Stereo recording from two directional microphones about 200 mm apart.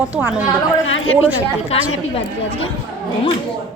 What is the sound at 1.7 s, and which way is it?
A woman's voice, 30° left (ahead or behind).